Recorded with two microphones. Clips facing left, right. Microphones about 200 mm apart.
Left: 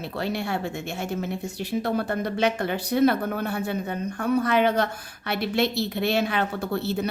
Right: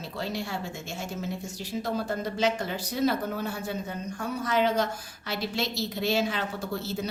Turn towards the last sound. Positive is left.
turn(degrees=60)  # may be behind; listen again after turning